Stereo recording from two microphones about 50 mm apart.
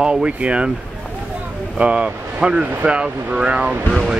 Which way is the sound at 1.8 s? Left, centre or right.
Right.